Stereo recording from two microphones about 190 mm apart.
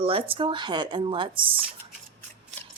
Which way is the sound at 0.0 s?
30° right (ahead or behind).